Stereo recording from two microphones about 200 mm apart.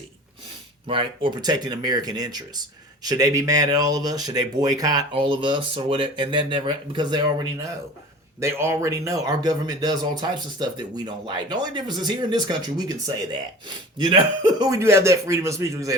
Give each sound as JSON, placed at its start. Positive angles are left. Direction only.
{"t": 0.9, "sound": "speech", "side_deg": -25}